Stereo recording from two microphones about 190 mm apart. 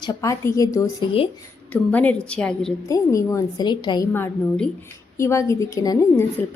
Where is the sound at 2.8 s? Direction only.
15° left (ahead or behind).